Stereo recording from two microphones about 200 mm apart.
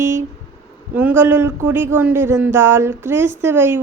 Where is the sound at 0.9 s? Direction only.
10° right (ahead or behind).